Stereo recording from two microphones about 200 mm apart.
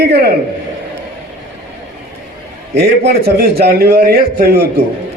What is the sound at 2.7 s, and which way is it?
A man's voice, 55° right (ahead or behind).